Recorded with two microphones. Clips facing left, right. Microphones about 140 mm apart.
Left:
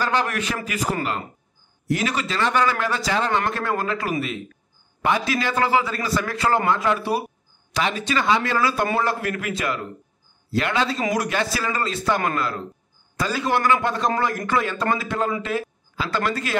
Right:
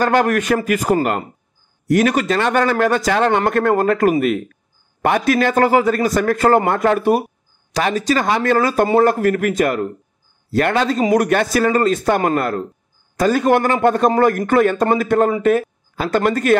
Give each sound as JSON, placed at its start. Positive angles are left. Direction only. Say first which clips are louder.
{"t": 0.0, "sound": "a man's voice", "louder": "right 8 dB", "side_deg": -50}